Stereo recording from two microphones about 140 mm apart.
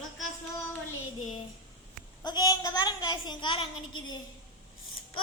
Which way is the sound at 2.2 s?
30° left (ahead or behind).